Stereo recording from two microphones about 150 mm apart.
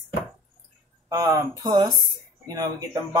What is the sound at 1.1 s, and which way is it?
Speech, 20° right (ahead or behind).